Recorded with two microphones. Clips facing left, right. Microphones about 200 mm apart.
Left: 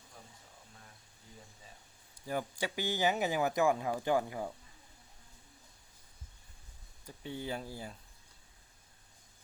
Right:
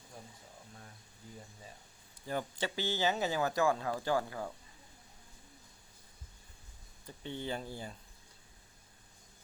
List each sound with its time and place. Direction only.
2.2 s speech: 10° left (ahead or behind)
7.1 s speech: 5° left (ahead or behind)